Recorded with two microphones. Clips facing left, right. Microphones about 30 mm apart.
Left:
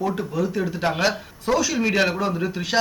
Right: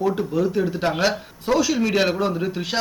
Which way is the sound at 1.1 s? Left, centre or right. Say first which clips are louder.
Right 1 dB; centre.